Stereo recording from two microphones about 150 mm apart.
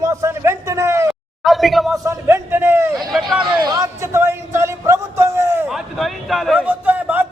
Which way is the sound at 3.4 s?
30° right (ahead or behind).